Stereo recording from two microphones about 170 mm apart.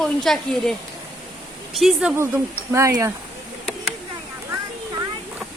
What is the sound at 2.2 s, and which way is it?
Speech, 15° right (ahead or behind).